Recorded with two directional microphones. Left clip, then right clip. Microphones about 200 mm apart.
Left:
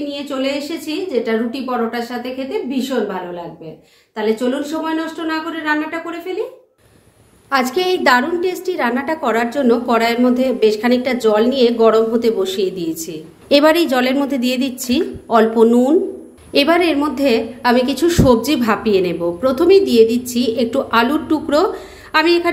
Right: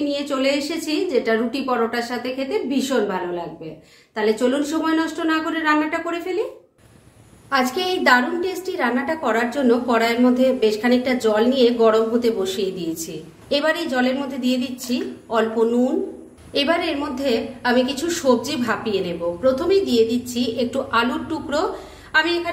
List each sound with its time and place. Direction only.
0.1 s a woman's voice: 10° right (ahead or behind)
7.4 s a woman's voice: 40° left (ahead or behind)